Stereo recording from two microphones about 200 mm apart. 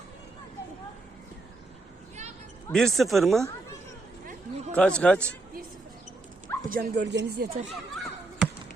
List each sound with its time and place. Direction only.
2.7 s speech: centre (ahead or behind)
4.3 s chatter: 35° right (ahead or behind)
4.7 s speech: 5° left (ahead or behind)
6.7 s speech: 45° right (ahead or behind)
7.7 s basketball bounce: centre (ahead or behind)